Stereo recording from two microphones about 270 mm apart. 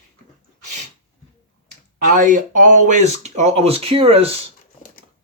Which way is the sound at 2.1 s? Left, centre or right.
Right.